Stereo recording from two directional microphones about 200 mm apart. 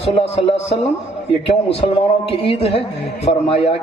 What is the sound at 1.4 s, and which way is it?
Speech, 30° left (ahead or behind).